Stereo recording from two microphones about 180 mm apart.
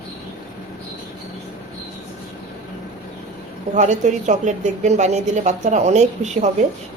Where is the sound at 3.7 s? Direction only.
40° right (ahead or behind).